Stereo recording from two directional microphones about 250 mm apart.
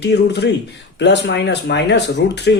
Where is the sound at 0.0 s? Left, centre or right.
Left.